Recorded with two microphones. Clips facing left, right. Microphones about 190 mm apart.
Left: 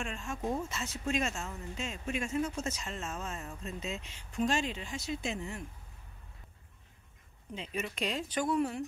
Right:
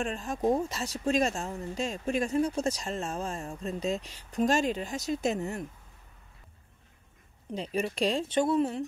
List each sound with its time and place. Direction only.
0.0 s speech: 35° right (ahead or behind)
7.5 s speech: 35° right (ahead or behind)